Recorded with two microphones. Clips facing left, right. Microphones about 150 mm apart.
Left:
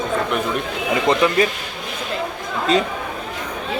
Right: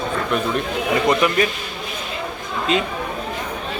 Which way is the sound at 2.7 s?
35° left (ahead or behind).